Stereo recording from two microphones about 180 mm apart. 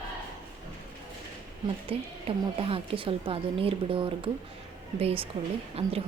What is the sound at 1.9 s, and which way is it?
A woman's voice, 30° right (ahead or behind).